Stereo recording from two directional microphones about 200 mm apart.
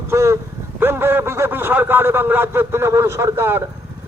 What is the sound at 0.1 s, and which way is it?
A man's voice, 15° right (ahead or behind).